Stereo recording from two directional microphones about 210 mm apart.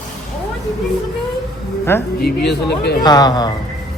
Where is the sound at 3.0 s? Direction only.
20° left (ahead or behind).